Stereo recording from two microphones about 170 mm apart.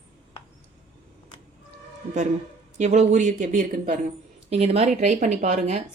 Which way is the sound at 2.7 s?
40° right (ahead or behind).